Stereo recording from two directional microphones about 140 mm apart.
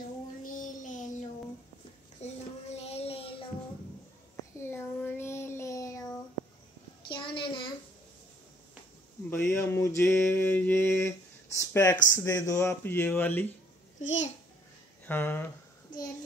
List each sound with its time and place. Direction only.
0.4 s child singing: 75° left (ahead or behind)
2.2 s child singing: 50° left (ahead or behind)
4.6 s child singing: 15° left (ahead or behind)
7.1 s child singing: 35° left (ahead or behind)
9.3 s mantra: 15° left (ahead or behind)
11.5 s speech: 20° left (ahead or behind)
14.0 s a child's voice: 60° left (ahead or behind)
15.0 s speech: 15° left (ahead or behind)